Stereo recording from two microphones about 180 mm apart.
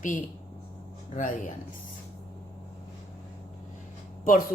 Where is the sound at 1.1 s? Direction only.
45° left (ahead or behind).